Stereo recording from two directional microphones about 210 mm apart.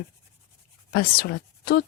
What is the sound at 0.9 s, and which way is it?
Speech, 45° left (ahead or behind).